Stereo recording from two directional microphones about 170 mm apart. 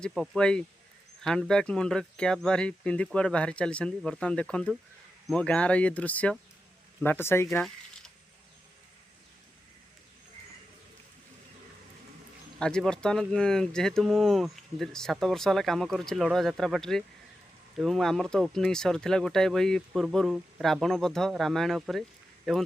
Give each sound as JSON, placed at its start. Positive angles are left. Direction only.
{"t": 0.0, "sound": "speech", "side_deg": 5}
{"t": 12.5, "sound": "speech", "side_deg": 5}